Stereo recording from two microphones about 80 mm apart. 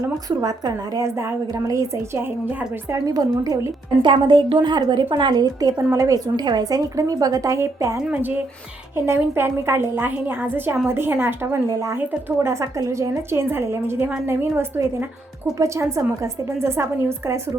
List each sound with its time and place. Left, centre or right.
0.0 s a woman's voice: right
3.1 s a woman's voice: right
4.0 s a woman's voice: right
8.1 s a woman's voice: right
15.5 s a woman's voice: right